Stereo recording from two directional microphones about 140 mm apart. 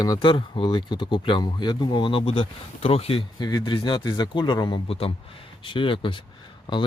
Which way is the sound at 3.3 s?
30° left (ahead or behind).